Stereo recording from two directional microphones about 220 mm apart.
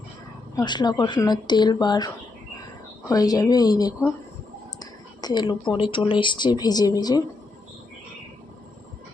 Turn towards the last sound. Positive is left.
turn(degrees=15)  # may be behind; listen again after turning